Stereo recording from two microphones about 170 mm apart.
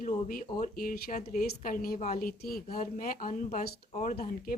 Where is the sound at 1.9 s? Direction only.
45° left (ahead or behind).